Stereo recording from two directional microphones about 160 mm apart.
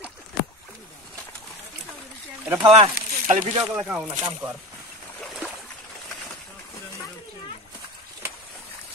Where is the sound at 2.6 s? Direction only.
35° right (ahead or behind).